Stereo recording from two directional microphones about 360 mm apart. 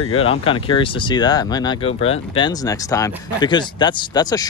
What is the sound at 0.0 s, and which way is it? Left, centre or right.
Speech, centre.